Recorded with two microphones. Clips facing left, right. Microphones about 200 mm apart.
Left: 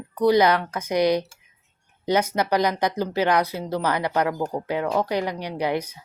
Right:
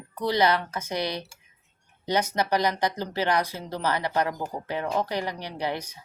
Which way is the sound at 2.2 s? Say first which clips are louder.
Left 3 dB; 10° left (ahead or behind).